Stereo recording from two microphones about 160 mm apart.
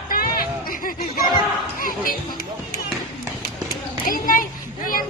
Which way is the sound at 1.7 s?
60° left (ahead or behind).